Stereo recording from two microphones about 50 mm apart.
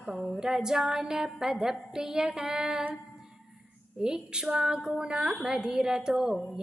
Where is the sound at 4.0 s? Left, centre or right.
Centre.